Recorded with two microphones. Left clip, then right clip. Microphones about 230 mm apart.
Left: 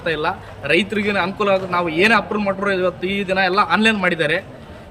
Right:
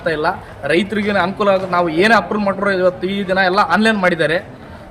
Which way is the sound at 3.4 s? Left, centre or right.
Centre.